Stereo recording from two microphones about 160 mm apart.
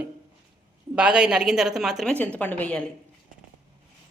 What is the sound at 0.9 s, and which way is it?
Speech, 5° right (ahead or behind).